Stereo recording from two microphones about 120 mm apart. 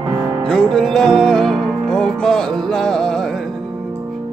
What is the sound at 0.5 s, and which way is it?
Music, 5° left (ahead or behind).